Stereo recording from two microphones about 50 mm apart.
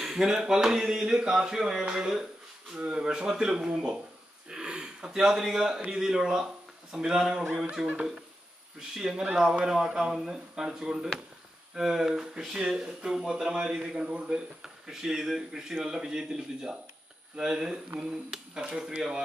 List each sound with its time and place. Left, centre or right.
0.0 s a man's voice: centre
14.9 s speech: centre